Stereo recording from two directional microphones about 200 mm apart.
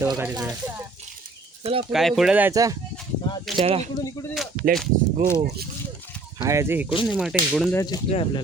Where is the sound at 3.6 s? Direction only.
30° right (ahead or behind).